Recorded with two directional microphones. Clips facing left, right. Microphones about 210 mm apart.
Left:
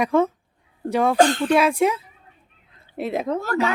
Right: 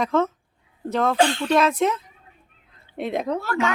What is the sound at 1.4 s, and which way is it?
Speech, 10° left (ahead or behind).